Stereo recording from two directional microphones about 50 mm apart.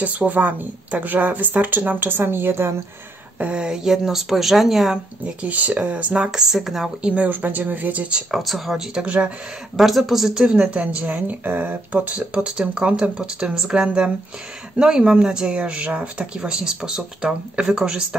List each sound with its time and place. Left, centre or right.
0.0 s speech: right
3.3 s speech: right; by 4.9 s centre
4.9 s speech: right
6.3 s speech: centre
7.2 s speech: right
8.3 s speech: centre
10.4 s speech: centre
11.4 s speech: right; by 18.0 s centre